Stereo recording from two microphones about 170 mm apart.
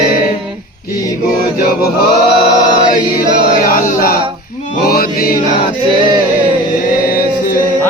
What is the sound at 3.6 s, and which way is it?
Music, 50° left (ahead or behind).